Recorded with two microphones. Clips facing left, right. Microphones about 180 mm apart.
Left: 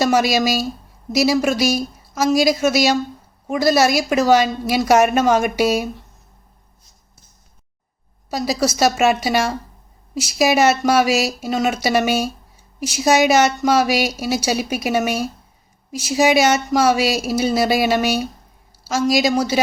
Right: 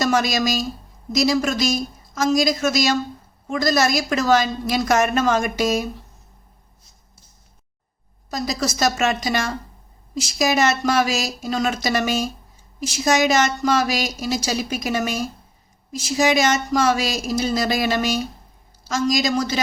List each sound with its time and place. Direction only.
0.0 s a woman's voice: 5° left (ahead or behind)
8.3 s a woman's voice: 5° left (ahead or behind)
15.9 s a woman's voice: 65° left (ahead or behind)
16.1 s a woman's voice: 5° left (ahead or behind)